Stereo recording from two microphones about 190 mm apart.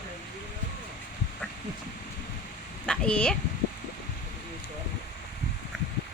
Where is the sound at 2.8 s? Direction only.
5° left (ahead or behind).